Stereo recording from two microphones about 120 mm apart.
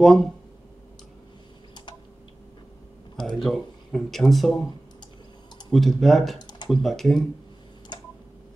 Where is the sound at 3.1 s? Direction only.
5° left (ahead or behind).